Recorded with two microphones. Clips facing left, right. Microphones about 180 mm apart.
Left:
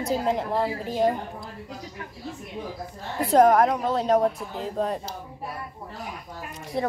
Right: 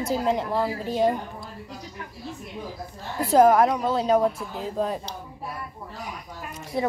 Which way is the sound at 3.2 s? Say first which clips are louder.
Right 1 dB; 5° right (ahead or behind).